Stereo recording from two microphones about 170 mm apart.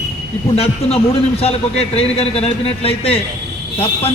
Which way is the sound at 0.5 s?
35° left (ahead or behind).